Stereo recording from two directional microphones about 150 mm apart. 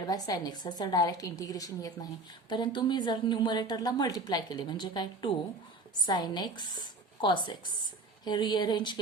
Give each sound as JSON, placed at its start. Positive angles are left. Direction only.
{"t": 0.0, "sound": "a woman's voice", "side_deg": 25}